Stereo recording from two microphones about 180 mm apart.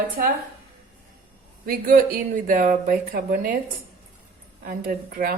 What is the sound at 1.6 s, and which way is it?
Speech, 50° right (ahead or behind).